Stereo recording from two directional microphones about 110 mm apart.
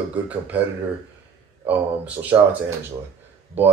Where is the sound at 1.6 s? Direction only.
15° right (ahead or behind).